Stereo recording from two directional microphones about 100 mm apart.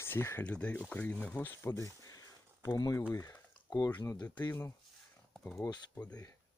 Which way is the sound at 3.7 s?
40° left (ahead or behind).